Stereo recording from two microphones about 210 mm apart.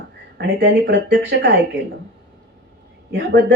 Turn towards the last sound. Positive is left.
turn(degrees=-55)  # may be behind; listen again after turning